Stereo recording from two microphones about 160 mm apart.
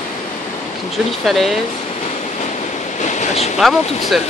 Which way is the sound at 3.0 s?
45° left (ahead or behind).